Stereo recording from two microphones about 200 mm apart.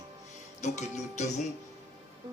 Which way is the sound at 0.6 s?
35° left (ahead or behind).